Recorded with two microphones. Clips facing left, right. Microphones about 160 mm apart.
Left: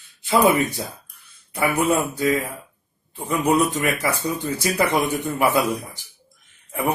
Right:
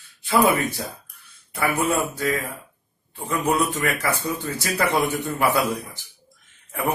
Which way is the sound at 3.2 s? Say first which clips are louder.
Left 3 dB; 20° left (ahead or behind).